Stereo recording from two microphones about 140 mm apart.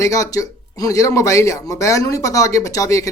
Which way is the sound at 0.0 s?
25° left (ahead or behind).